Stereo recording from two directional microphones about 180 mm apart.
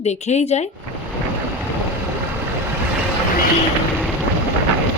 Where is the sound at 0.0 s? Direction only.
40° left (ahead or behind).